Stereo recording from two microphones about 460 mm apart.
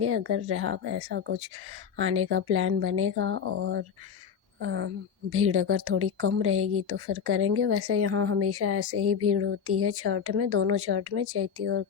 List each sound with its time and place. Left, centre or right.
0.0 s speech: right